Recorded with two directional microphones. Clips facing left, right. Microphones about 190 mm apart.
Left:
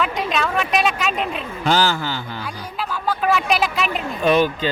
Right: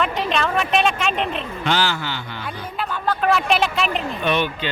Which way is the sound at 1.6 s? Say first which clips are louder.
Left 4 dB; 40° left (ahead or behind).